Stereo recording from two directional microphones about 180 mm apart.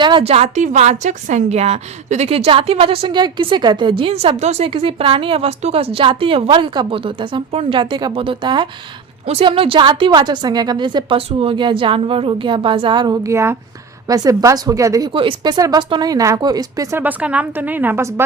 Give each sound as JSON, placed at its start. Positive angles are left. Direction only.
{"t": 0.0, "sound": "a woman's voice", "side_deg": -30}